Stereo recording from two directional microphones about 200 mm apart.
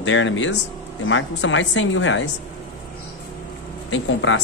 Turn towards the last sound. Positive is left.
turn(degrees=70)  # may be behind; listen again after turning